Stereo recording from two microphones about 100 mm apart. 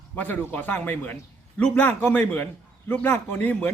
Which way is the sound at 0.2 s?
15° left (ahead or behind).